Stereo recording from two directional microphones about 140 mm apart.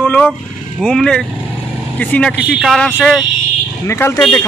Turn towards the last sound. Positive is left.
turn(degrees=5)  # may be behind; listen again after turning